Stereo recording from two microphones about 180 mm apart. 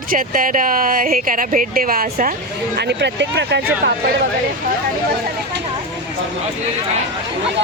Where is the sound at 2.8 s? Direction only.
70° right (ahead or behind).